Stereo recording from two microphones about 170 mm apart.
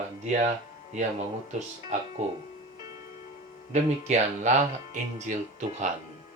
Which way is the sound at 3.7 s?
40° right (ahead or behind).